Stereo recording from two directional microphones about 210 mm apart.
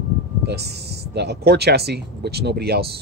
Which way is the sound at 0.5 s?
50° right (ahead or behind).